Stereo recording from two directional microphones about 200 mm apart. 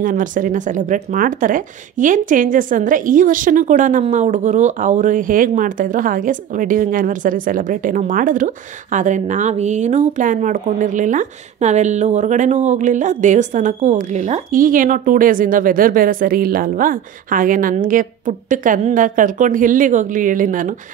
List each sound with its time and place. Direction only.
0.0 s speech: 40° right (ahead or behind)